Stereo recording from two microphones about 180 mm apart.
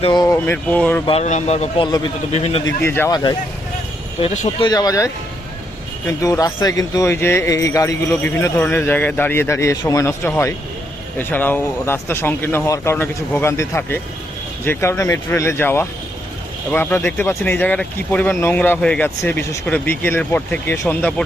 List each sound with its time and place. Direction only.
0.0 s speech: 20° left (ahead or behind)
0.3 s speech: 10° left (ahead or behind)
1.0 s speech: 35° left (ahead or behind)
2.8 s speech: 15° left (ahead or behind)
4.2 s speech: 30° left (ahead or behind)
6.2 s speech: 20° left (ahead or behind)